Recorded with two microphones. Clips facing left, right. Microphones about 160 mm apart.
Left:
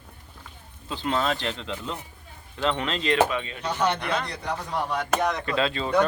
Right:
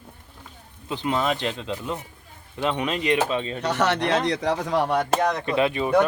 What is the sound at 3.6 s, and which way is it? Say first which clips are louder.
Speech: right 3 dB; 75° right (ahead or behind).